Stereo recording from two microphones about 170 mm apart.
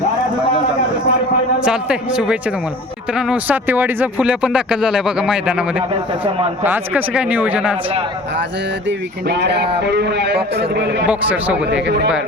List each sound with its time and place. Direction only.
1.6 s speech: 5° right (ahead or behind)
6.2 s speech: 35° right (ahead or behind)
6.7 s speech: 10° right (ahead or behind)
8.9 s speech: 85° right
11.0 s speech: 10° right (ahead or behind)
11.9 s speech: 90° right